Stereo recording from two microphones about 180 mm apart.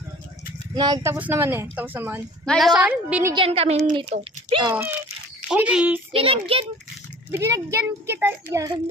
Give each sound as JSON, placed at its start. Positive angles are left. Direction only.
{"t": 0.7, "sound": "a child's voice", "side_deg": -25}
{"t": 2.4, "sound": "a child's voice", "side_deg": 0}
{"t": 3.3, "sound": "a child's voice", "side_deg": -35}
{"t": 4.7, "sound": "a child's voice", "side_deg": -10}
{"t": 6.1, "sound": "a child's voice", "side_deg": -30}
{"t": 7.3, "sound": "a child's voice", "side_deg": -15}